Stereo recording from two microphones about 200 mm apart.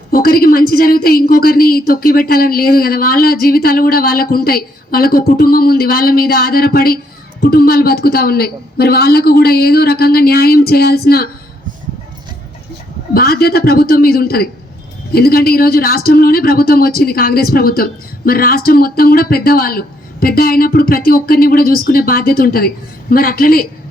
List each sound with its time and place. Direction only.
0.1 s speech: 50° left (ahead or behind)
13.1 s speech: 50° left (ahead or behind)